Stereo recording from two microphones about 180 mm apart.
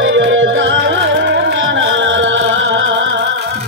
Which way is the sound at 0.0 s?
90° right.